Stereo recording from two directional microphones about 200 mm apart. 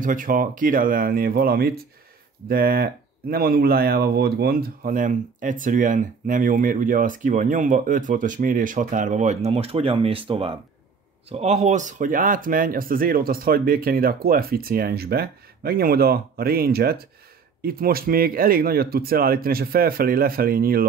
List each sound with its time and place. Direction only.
0.0 s speech: 40° right (ahead or behind)